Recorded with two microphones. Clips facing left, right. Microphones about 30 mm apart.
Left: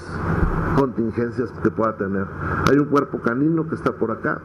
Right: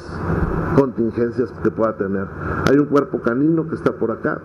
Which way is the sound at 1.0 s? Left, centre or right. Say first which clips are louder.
Right 3 dB; right.